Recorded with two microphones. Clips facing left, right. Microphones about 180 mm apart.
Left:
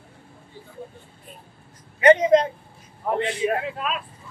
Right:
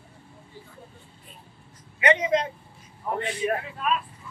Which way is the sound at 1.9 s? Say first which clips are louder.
Left 7 dB; 40° left (ahead or behind).